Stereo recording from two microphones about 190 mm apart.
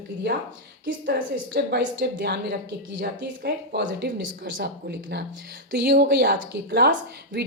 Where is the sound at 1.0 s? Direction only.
55° right (ahead or behind).